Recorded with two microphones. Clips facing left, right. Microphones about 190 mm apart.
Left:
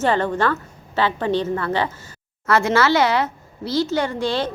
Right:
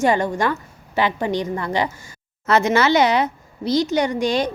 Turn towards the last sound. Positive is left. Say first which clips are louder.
# right 2 dB
turn(degrees=-15)  # may be behind; listen again after turning